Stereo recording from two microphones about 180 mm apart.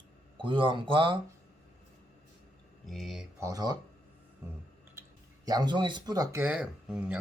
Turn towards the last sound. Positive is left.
turn(degrees=-5)  # may be behind; listen again after turning